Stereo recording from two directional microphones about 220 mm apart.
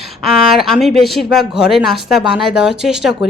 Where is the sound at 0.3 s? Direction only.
Centre (ahead or behind).